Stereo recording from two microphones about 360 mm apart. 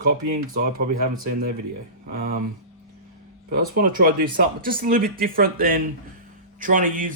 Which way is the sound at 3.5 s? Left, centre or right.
Right.